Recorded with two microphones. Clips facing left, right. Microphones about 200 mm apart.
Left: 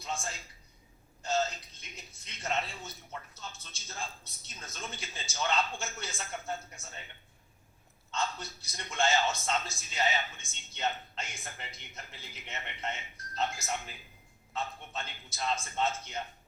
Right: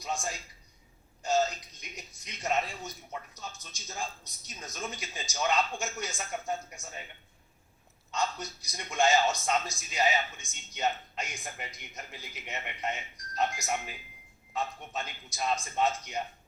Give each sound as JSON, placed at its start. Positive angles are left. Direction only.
{"t": 0.0, "sound": "a man's voice", "side_deg": -15}
{"t": 8.1, "sound": "a man's voice", "side_deg": -15}